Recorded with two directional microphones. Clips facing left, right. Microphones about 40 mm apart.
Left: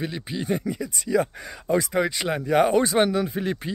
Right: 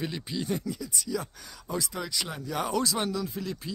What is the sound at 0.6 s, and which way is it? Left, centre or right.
Speech, left.